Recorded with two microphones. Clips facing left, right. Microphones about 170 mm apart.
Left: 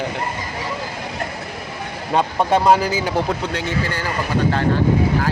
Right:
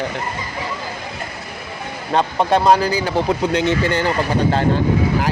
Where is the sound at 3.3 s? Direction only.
20° right (ahead or behind).